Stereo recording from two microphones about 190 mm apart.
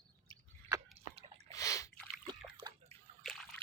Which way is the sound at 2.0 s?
25° right (ahead or behind).